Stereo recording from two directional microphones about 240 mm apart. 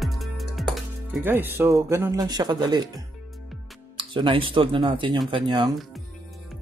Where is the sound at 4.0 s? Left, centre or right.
Right.